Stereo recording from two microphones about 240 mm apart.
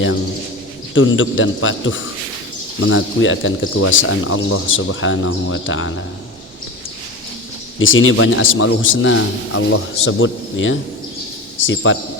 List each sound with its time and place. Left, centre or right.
0.9 s a man's voice: left
7.8 s a man's voice: left